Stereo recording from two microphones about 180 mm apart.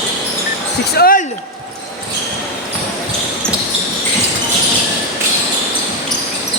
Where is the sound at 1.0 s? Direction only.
50° left (ahead or behind).